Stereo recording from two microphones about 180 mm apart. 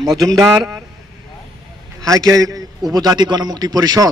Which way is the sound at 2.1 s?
20° right (ahead or behind).